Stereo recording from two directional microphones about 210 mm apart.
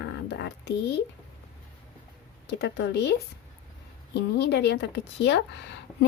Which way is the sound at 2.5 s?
55° left (ahead or behind).